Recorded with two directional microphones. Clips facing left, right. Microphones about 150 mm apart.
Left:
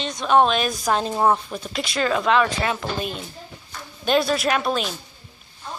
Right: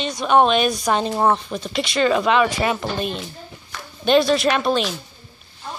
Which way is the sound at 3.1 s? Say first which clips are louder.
Right 3 dB; 80° right.